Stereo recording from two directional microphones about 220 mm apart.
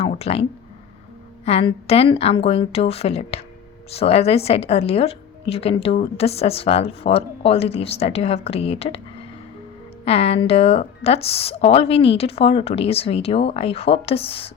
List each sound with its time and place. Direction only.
0.0 s speech: 30° left (ahead or behind)
1.5 s a woman's voice: 30° left (ahead or behind)
10.1 s a woman's voice: 25° left (ahead or behind)